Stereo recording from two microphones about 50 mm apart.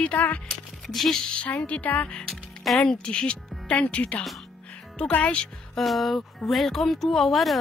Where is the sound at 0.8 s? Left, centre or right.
Centre.